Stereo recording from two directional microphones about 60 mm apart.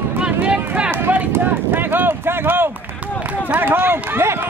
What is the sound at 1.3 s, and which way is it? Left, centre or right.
Speech, right.